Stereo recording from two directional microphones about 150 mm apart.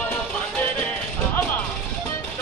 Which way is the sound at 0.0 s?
10° left (ahead or behind).